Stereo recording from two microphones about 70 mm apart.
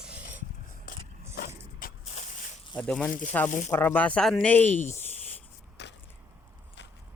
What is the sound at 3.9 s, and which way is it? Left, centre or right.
Speech, centre.